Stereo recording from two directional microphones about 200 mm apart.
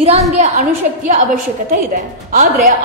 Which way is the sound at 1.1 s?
45° right (ahead or behind).